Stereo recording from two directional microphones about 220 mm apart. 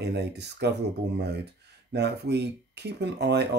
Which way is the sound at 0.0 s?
50° right (ahead or behind).